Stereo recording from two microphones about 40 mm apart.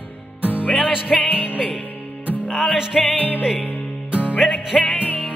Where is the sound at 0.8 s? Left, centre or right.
Left.